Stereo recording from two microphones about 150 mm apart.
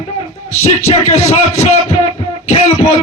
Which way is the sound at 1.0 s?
50° left (ahead or behind).